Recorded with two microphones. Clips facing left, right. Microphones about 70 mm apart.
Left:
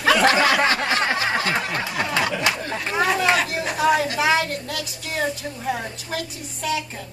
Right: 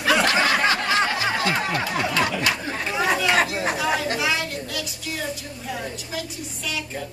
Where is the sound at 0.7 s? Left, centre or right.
Left.